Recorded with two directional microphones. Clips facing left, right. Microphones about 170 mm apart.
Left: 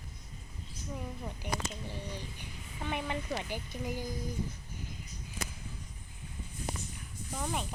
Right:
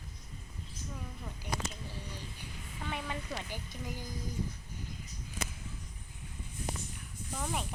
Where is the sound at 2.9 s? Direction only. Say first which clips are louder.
Left 4 dB; 20° left (ahead or behind).